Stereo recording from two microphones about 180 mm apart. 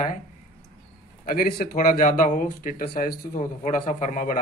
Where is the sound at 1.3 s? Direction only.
55° left (ahead or behind).